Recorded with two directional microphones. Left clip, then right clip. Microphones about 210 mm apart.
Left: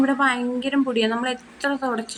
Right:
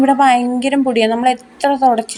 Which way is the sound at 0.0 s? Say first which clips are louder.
Right 9 dB; 25° right (ahead or behind).